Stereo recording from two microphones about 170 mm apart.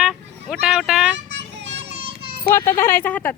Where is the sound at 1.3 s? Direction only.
90° right.